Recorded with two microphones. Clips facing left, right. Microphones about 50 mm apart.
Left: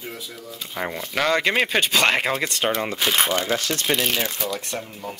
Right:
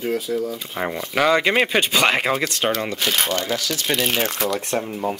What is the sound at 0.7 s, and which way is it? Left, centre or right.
Speech, centre.